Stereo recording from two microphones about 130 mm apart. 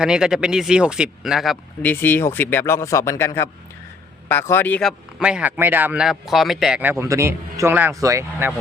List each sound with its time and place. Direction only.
0.0 s speech: 5° right (ahead or behind)
1.8 s a man's voice: 15° left (ahead or behind)
5.2 s speech: 10° right (ahead or behind)
6.9 s a man's voice: 20° right (ahead or behind)